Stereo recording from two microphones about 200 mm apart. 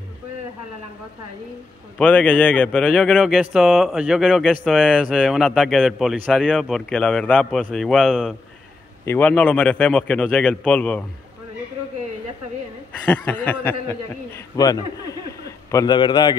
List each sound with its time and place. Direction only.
2.0 s a man's voice: 5° left (ahead or behind)
13.0 s a man's voice: 10° left (ahead or behind)